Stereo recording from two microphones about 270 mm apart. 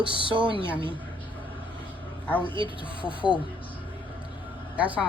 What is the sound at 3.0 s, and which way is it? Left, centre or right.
Mantra, centre.